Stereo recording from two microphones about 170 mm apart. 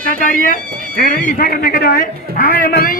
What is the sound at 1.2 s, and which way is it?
Speech, 70° left (ahead or behind).